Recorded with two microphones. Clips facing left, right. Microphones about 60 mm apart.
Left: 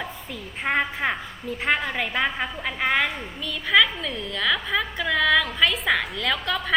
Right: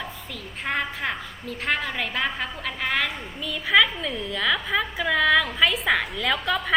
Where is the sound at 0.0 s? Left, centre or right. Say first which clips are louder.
Left 2 dB; centre.